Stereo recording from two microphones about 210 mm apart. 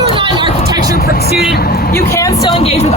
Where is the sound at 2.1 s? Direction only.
15° left (ahead or behind).